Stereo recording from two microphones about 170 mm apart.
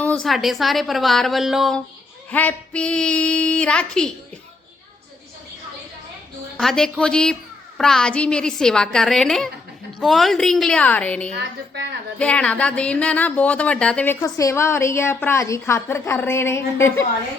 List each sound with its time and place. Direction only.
0.0 s a woman's voice: 5° left (ahead or behind)
2.3 s a woman's voice: 10° left (ahead or behind)
6.6 s a woman's voice: 5° left (ahead or behind)
11.3 s a woman's voice: 80° right
12.2 s a woman's voice: 5° left (ahead or behind)